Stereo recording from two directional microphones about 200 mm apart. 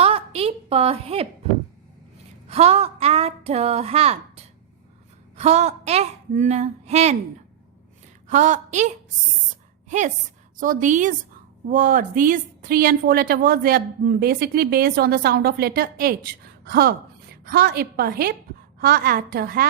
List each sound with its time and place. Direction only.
0.0 s a woman's voice: 30° right (ahead or behind)
2.5 s a woman's voice: 30° right (ahead or behind)
8.3 s a woman's voice: 35° right (ahead or behind)
9.9 s a woman's voice: 40° right (ahead or behind)